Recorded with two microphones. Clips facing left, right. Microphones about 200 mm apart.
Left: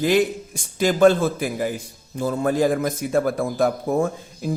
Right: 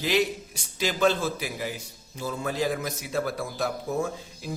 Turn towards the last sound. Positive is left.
turn(degrees=50)  # may be behind; listen again after turning